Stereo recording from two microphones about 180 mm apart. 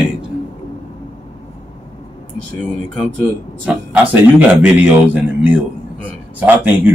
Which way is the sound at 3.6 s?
10° right (ahead or behind).